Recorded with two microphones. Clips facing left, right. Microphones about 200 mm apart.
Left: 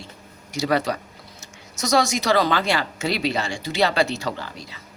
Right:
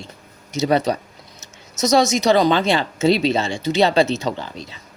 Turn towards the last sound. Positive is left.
turn(degrees=-25)  # may be behind; listen again after turning